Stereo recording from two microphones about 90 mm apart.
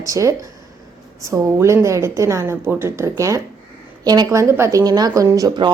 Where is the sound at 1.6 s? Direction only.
35° right (ahead or behind).